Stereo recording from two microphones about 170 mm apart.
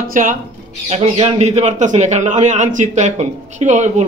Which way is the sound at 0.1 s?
50° right (ahead or behind).